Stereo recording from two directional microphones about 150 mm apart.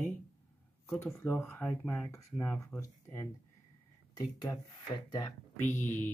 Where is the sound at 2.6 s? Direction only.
20° left (ahead or behind).